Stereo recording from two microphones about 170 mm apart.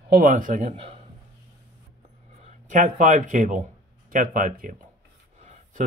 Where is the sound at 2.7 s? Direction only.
50° right (ahead or behind).